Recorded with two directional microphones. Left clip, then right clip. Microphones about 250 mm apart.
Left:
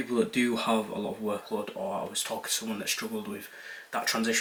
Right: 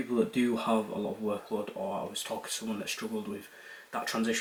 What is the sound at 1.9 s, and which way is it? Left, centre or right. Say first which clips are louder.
Speech: left 4 dB; centre.